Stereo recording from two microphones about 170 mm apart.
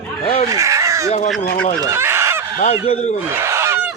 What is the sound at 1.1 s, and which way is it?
Speech, 45° left (ahead or behind).